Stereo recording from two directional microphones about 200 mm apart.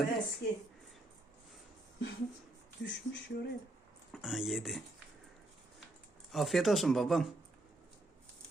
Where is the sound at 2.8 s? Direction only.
60° left (ahead or behind).